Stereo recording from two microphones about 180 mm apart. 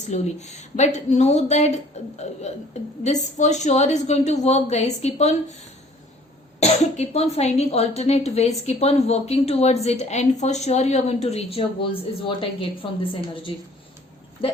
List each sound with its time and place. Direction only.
0.1 s speech: 40° left (ahead or behind)
6.6 s a woman's voice: 40° left (ahead or behind)